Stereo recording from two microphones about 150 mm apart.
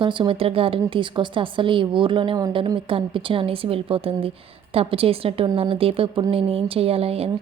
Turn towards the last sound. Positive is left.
turn(degrees=-40)  # may be behind; listen again after turning